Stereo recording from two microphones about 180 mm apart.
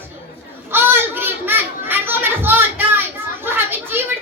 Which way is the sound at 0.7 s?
10° right (ahead or behind).